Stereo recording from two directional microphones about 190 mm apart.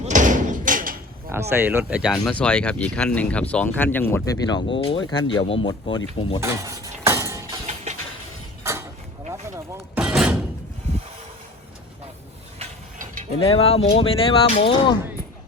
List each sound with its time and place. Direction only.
0.0 s slam: 40° right (ahead or behind)
1.3 s speech: 10° right (ahead or behind); by 6.4 s 30° left (ahead or behind)
6.4 s cutlery: 15° right (ahead or behind)
8.7 s a sound: 15° right (ahead or behind)
9.3 s door: 15° right (ahead or behind)
13.4 s speech: 30° left (ahead or behind)